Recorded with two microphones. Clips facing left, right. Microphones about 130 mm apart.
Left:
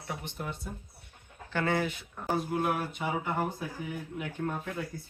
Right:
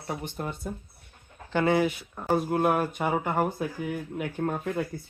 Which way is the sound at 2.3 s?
55° right (ahead or behind).